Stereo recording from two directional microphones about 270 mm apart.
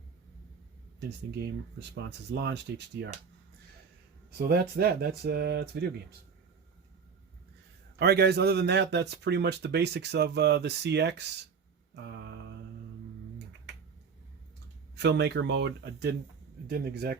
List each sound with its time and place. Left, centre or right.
2.0 s a man's voice: right
4.4 s a man's voice: right
7.9 s a man's voice: right
12.0 s mantra: right
14.9 s a man's voice: right